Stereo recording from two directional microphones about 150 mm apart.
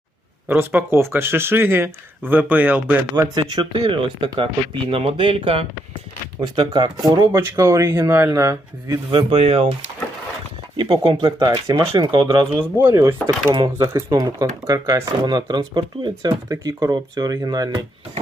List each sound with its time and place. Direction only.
0.4 s speech: 15° right (ahead or behind)
3.3 s speech: 30° right (ahead or behind)
9.0 s speech: 35° right (ahead or behind)
10.8 s speech: 35° right (ahead or behind)
12.7 s speech: 20° right (ahead or behind)
13.5 s speech: 30° right (ahead or behind)